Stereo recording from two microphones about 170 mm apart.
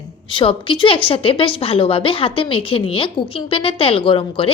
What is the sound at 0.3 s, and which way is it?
A woman's voice, 30° left (ahead or behind).